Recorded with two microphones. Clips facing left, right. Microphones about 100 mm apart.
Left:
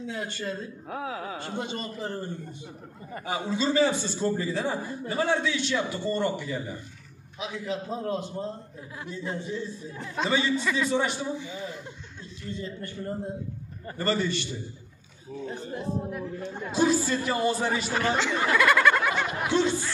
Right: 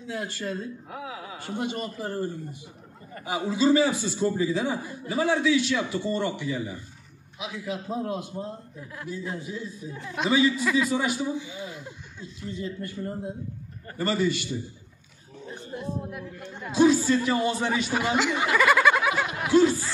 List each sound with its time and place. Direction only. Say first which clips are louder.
0.1 s a man's voice: right 4 dB; 5° right (ahead or behind)
0.8 s speech: left 3 dB; 40° left (ahead or behind)
1.4 s a man's voice: right 2 dB; 10° right (ahead or behind)
3.3 s a man's voice: right 5 dB; 5° right (ahead or behind)
12.5 s a man's voice: right 3 dB; 5° right (ahead or behind)
15.5 s speech: even; 30° left (ahead or behind)
16.6 s a man's voice: right 4 dB; centre (ahead or behind)
17.9 s a sound: right 1 dB; 10° right (ahead or behind)